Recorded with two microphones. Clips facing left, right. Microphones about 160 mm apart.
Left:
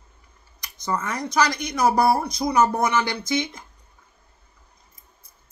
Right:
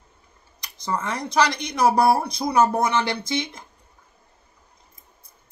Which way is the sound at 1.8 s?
30° right (ahead or behind).